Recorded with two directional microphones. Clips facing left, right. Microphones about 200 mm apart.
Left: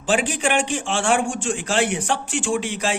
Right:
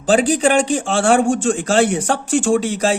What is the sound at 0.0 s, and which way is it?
A man's voice, 40° right (ahead or behind).